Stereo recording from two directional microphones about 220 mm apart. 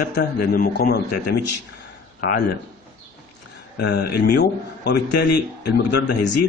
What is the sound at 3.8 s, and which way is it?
A man's voice, 45° left (ahead or behind).